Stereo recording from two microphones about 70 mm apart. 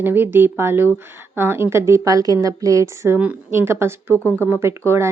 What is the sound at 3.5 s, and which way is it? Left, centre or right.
Speech, right.